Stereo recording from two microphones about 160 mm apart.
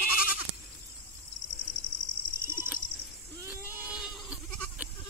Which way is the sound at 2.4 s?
15° right (ahead or behind).